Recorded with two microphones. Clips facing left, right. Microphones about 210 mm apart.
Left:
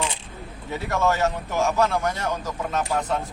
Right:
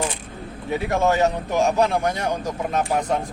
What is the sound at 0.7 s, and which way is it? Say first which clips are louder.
Speech: right 3 dB; 15° right (ahead or behind).